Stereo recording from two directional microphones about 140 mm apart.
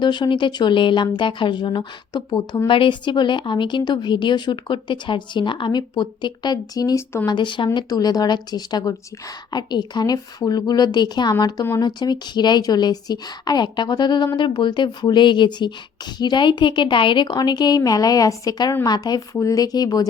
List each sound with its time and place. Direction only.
0.0 s speech: 35° left (ahead or behind)
7.3 s a woman's voice: 35° left (ahead or behind)